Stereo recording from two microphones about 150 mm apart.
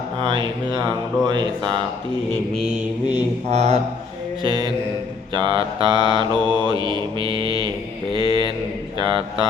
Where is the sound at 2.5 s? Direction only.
5° right (ahead or behind).